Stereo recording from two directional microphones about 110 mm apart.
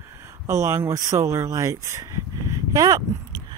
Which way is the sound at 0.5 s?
25° right (ahead or behind).